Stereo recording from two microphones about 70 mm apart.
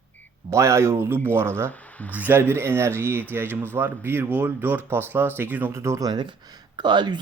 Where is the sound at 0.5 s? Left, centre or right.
Right.